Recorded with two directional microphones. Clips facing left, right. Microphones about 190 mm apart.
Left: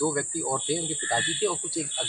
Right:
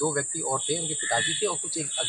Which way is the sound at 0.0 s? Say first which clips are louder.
Left 1 dB; centre (ahead or behind).